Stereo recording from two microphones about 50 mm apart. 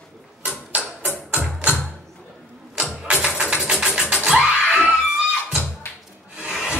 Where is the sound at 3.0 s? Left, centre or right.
Right.